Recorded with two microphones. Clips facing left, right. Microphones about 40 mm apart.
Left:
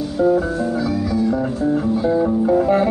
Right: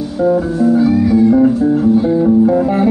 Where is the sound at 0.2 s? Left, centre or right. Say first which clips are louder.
Right 4 dB; centre.